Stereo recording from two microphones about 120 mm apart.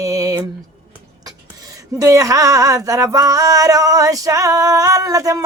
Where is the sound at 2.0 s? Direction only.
30° right (ahead or behind).